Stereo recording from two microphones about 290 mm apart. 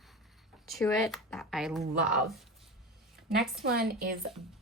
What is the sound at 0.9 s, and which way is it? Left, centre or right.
Speech, centre.